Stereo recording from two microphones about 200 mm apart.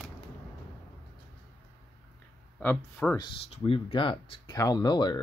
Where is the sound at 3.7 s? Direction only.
25° left (ahead or behind).